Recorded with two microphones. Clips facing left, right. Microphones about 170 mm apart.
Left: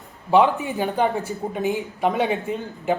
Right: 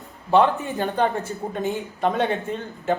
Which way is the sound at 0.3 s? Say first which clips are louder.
Left 1 dB; 15° left (ahead or behind).